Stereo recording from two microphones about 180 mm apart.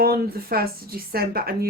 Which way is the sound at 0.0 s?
55° right (ahead or behind).